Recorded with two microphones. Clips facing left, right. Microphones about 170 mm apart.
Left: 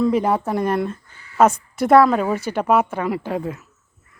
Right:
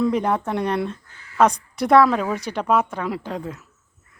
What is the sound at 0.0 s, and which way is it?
A woman's voice, 5° left (ahead or behind).